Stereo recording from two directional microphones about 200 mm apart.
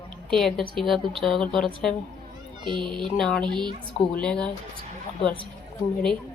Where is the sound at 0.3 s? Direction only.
Centre (ahead or behind).